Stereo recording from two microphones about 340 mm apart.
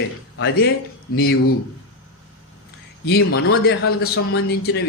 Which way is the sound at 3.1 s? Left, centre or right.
Left.